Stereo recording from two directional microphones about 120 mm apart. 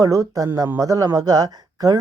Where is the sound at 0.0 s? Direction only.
30° right (ahead or behind).